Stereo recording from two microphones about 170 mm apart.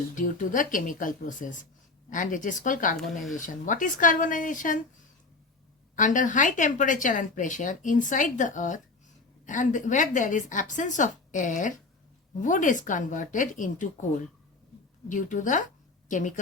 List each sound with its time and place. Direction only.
0.2 s speech: 50° left (ahead or behind)
3.0 s speech: centre (ahead or behind)
3.3 s speech: 50° left (ahead or behind)
6.0 s speech: 50° left (ahead or behind)
15.1 s a woman's voice: 50° left (ahead or behind)